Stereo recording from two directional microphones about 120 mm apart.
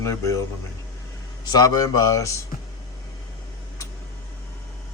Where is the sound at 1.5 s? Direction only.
30° left (ahead or behind).